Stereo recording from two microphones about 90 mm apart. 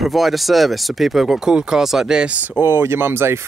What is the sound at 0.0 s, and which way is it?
Speech, centre (ahead or behind).